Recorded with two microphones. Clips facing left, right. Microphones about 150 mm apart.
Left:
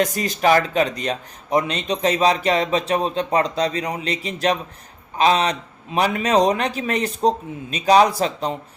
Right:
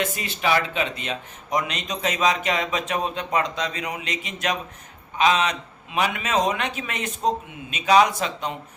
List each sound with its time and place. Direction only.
0.0 s speech: 40° left (ahead or behind)